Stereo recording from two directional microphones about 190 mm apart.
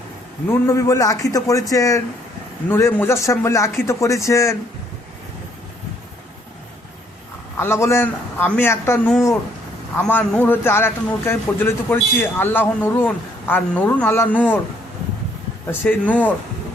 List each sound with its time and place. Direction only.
0.4 s a man's voice: 15° left (ahead or behind)
7.6 s a man's voice: 15° left (ahead or behind)
15.6 s a man's voice: 10° left (ahead or behind)